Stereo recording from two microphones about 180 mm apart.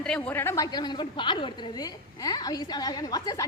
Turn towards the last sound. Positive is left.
turn(degrees=20)  # may be behind; listen again after turning